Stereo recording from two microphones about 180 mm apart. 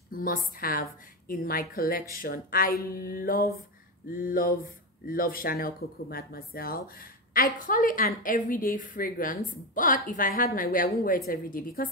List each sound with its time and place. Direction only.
0.1 s a woman's voice: 50° left (ahead or behind)